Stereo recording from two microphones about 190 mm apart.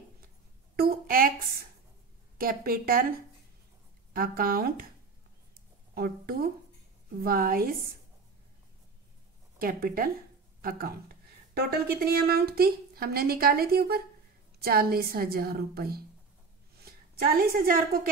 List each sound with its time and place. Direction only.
0.7 s a sound: 50° right (ahead or behind)
2.3 s speech: 50° right (ahead or behind)
4.1 s speech: 50° right (ahead or behind)
5.9 s speech: 50° right (ahead or behind)
9.6 s speech: 50° right (ahead or behind)
16.7 s a sound: 55° right (ahead or behind)